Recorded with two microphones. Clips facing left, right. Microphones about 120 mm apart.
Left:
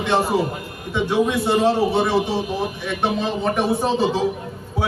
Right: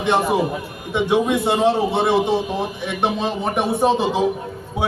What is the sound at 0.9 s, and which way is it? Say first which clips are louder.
A man's voice: right 2 dB; 20° right (ahead or behind).